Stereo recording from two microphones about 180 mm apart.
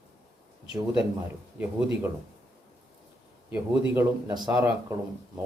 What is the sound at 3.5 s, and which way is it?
Speech, 10° right (ahead or behind).